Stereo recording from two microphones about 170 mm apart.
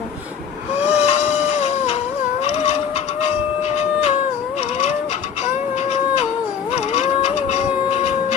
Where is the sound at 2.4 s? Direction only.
40° left (ahead or behind).